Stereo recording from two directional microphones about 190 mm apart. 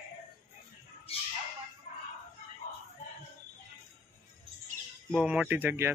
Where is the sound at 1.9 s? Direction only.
45° left (ahead or behind).